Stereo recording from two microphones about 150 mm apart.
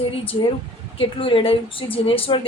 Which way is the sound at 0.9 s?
35° left (ahead or behind).